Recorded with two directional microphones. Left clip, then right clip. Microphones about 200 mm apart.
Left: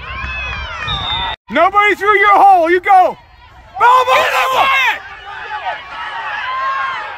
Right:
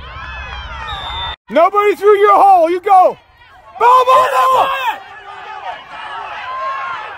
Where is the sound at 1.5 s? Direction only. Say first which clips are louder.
Even; 75° right (ahead or behind).